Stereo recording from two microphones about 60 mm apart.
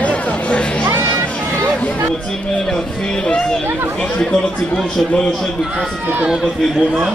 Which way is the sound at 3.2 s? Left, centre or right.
Centre.